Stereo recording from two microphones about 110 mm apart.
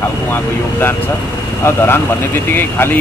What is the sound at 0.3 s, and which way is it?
Speech, 20° left (ahead or behind).